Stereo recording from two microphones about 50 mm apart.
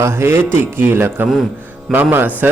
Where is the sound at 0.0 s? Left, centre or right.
Right.